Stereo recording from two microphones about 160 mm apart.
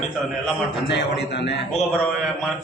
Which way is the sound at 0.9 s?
90° left.